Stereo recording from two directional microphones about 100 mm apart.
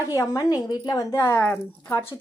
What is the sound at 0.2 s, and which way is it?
A woman's voice, 35° left (ahead or behind).